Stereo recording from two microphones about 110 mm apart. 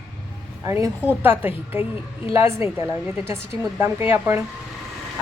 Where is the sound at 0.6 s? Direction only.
25° right (ahead or behind).